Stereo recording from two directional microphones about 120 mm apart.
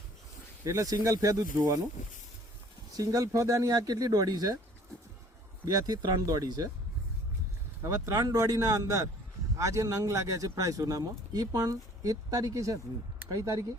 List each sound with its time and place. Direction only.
0.6 s speech: 25° right (ahead or behind)
2.9 s speech: 30° right (ahead or behind)
5.6 s speech: 30° right (ahead or behind)
7.8 s speech: 30° right (ahead or behind)